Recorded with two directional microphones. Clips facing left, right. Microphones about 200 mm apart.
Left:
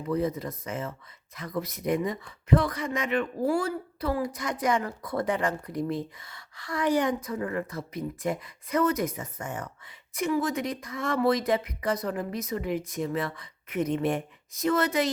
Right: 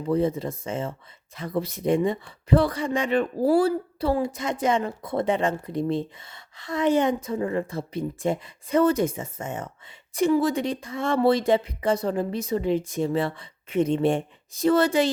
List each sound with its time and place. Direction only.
0.1 s speech: 30° right (ahead or behind)